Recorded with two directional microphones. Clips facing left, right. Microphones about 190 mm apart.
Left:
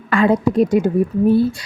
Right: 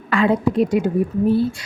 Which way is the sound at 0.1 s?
45° left (ahead or behind).